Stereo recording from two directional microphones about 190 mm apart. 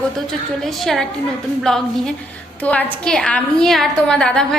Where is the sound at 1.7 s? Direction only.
5° left (ahead or behind).